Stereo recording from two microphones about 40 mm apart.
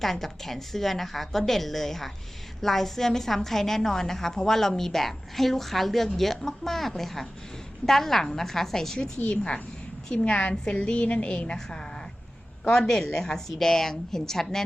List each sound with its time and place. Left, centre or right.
0.0 s a woman's voice: centre
9.0 s a woman's voice: left
12.8 s a woman's voice: centre